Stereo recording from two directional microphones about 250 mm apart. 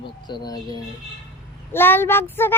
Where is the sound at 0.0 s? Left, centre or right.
Centre.